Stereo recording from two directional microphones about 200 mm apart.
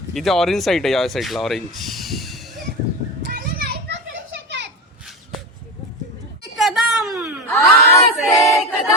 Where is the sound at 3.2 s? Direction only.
45° right (ahead or behind).